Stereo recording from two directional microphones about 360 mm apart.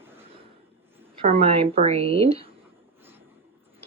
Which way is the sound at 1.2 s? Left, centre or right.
Centre.